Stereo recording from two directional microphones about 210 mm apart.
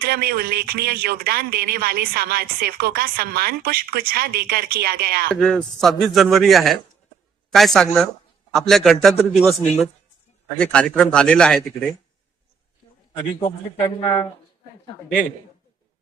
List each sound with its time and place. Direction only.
0.0 s speech: 45° right (ahead or behind)
5.3 s a man's voice: 5° left (ahead or behind)
10.6 s a man's voice: 5° left (ahead or behind)
13.4 s speech: 25° left (ahead or behind)